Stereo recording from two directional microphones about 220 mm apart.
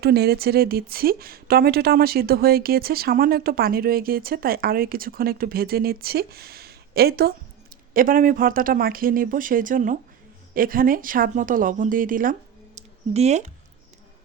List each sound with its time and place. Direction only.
0.0 s a woman's voice: 45° right (ahead or behind); by 13.5 s 30° right (ahead or behind)